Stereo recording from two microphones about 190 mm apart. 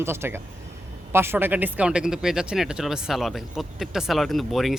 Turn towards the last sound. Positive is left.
turn(degrees=0)  # may be behind; listen again after turning